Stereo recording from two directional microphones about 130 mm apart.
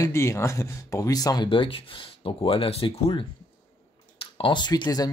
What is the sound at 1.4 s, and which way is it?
Speech, 40° left (ahead or behind).